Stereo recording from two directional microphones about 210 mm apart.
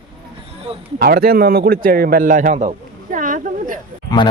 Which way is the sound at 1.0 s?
45° right (ahead or behind).